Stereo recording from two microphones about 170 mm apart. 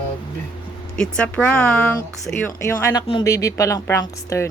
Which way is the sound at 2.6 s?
15° left (ahead or behind).